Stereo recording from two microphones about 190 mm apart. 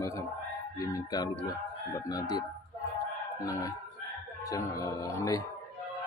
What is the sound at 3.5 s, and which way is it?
Speech, 15° left (ahead or behind).